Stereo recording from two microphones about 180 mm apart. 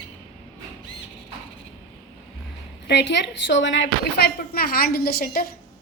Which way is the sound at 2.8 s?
75° left (ahead or behind).